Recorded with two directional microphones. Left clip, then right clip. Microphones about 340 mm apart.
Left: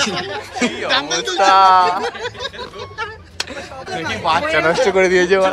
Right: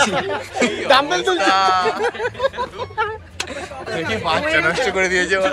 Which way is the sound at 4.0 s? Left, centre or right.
Centre.